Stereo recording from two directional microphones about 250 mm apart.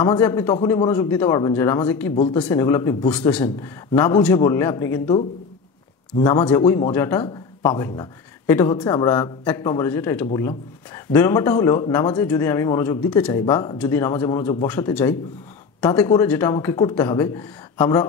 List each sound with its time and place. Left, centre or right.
0.0 s speech: centre
6.1 s speech: centre